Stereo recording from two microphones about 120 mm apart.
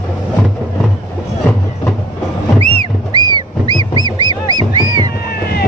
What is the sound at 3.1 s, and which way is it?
Music, 35° right (ahead or behind).